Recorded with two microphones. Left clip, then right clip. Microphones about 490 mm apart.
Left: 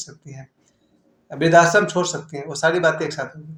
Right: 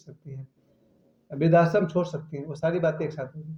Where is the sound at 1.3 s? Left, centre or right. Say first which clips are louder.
Left 7 dB; right.